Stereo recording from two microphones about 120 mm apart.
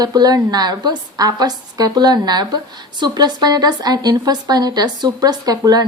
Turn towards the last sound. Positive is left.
turn(degrees=-35)  # may be behind; listen again after turning